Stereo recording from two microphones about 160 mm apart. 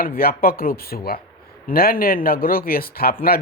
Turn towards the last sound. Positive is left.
turn(degrees=70)  # may be behind; listen again after turning